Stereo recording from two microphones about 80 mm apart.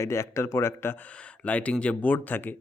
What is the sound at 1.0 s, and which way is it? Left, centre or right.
A man's voice, centre.